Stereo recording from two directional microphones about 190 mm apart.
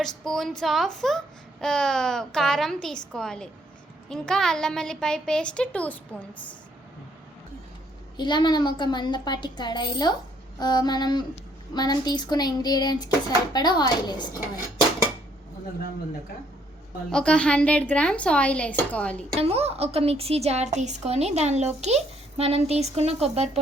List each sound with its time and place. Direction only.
0.0 s a woman's voice: centre (ahead or behind)
8.1 s a woman's voice: 25° left (ahead or behind)
17.1 s a woman's voice: 5° left (ahead or behind)
19.4 s a woman's voice: 30° right (ahead or behind)